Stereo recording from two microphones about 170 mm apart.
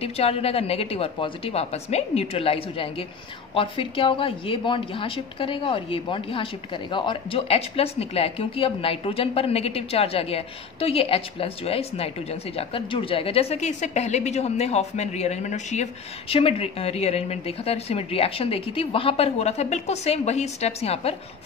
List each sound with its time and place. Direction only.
0.0 s a woman's voice: 35° left (ahead or behind)